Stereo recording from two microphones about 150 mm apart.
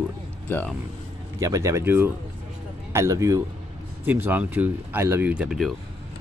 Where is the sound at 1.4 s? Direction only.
20° right (ahead or behind); by 5.8 s centre (ahead or behind).